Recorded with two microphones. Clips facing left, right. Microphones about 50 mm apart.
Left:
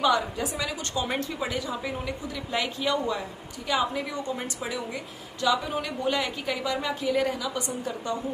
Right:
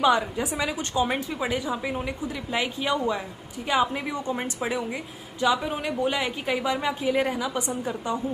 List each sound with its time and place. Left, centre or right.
0.0 s a woman's voice: right